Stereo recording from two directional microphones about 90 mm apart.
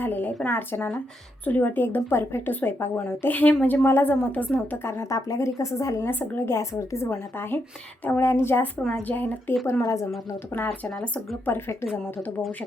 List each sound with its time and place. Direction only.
0.0 s a sound: 20° left (ahead or behind)
0.4 s a woman's voice: 25° left (ahead or behind)
6.1 s a woman's voice: 25° left (ahead or behind)
9.8 s speech: 35° left (ahead or behind)
10.5 s a woman's voice: 25° left (ahead or behind)